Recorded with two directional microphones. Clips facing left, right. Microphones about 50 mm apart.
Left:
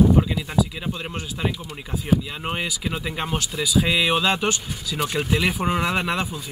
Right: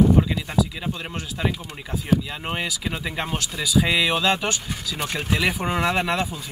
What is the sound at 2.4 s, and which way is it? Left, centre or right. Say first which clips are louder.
Speech: left 1 dB; centre.